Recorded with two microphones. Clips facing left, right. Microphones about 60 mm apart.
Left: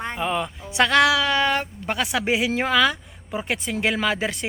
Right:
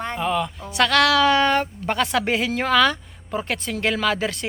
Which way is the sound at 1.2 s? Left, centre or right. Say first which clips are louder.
Right 4 dB; centre.